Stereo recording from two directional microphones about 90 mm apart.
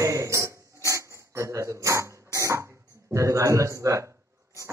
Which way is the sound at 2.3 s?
35° right (ahead or behind).